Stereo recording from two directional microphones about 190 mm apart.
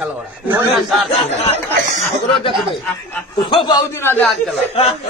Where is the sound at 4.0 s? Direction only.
10° left (ahead or behind).